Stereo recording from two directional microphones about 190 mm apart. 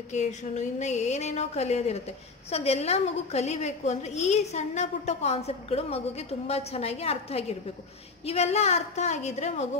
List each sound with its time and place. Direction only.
0.1 s a woman's voice: 35° left (ahead or behind)